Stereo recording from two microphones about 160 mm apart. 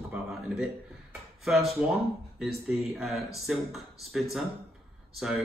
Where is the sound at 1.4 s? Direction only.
Centre (ahead or behind).